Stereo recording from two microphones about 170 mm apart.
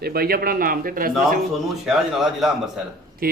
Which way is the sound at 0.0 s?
65° right (ahead or behind).